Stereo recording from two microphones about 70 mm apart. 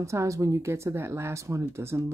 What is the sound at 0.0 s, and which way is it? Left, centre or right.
Speech, right.